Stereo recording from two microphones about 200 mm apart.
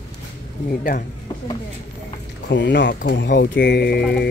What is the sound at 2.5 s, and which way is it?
Speech, 60° left (ahead or behind).